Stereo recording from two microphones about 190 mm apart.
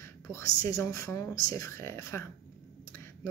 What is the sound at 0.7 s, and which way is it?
Speech, 15° left (ahead or behind).